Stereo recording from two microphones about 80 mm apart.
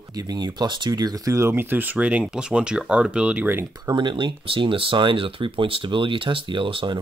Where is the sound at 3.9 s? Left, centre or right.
Right.